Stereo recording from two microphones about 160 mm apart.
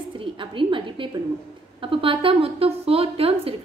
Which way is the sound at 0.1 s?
30° right (ahead or behind).